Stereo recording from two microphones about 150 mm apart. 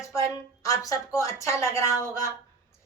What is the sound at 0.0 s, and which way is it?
A woman's voice, 20° left (ahead or behind).